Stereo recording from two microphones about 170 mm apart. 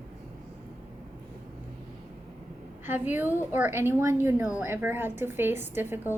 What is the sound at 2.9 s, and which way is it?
A woman's voice, 10° right (ahead or behind).